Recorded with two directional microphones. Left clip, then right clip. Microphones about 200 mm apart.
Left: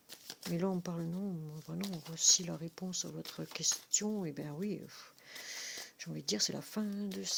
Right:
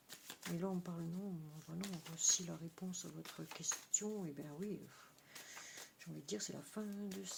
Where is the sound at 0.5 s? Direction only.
40° left (ahead or behind).